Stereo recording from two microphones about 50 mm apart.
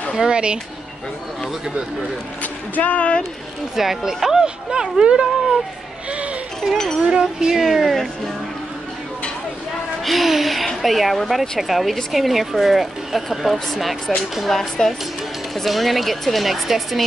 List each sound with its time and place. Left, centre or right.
0.1 s speech: centre
2.4 s speech: left
3.7 s speech: centre
6.0 s a sound: right
6.7 s speech: centre
7.1 s speech: centre
10.0 s speech: centre